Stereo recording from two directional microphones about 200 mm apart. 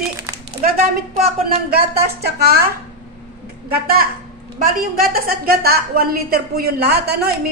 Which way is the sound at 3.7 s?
50° right (ahead or behind).